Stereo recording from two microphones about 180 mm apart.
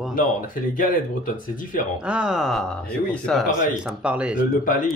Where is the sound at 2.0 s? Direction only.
5° right (ahead or behind).